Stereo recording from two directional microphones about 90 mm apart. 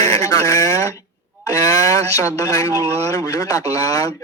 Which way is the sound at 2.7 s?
35° right (ahead or behind).